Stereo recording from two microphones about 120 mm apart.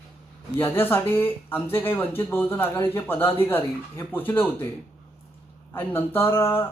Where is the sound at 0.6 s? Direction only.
20° left (ahead or behind).